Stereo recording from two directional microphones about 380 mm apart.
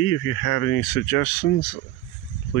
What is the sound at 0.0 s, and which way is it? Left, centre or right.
Speech, left.